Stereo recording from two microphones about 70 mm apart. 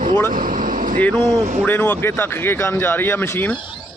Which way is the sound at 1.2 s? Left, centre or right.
Right.